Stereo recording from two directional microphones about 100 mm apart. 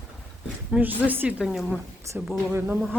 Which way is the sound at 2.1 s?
30° right (ahead or behind).